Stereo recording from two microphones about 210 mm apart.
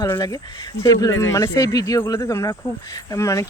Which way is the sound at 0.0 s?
15° left (ahead or behind).